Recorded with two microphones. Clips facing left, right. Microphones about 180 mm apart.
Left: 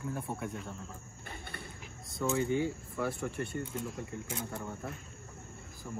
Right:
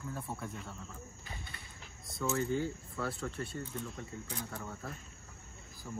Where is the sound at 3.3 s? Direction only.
65° left (ahead or behind).